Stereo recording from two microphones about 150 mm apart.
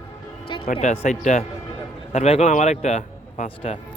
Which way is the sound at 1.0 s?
55° left (ahead or behind).